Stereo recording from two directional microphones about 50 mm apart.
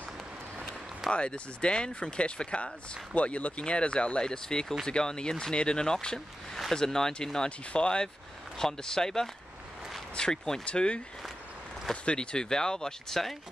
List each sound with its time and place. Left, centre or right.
1.1 s speech: left; by 13.4 s centre